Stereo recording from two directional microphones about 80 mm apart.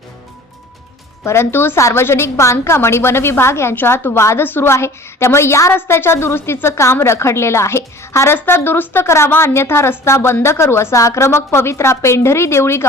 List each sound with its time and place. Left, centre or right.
1.2 s a woman's voice: left